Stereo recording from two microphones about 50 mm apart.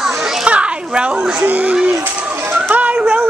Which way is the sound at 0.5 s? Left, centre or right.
Right.